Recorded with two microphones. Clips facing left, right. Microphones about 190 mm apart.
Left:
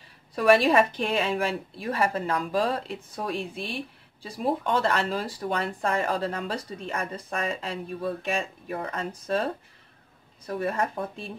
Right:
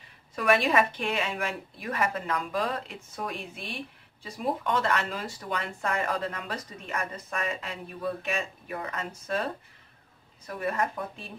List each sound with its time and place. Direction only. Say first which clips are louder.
0.4 s speech: left 4 dB; 35° left (ahead or behind)